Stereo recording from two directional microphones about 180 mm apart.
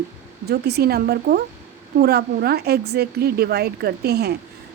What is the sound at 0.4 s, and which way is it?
A woman's voice, 65° right (ahead or behind).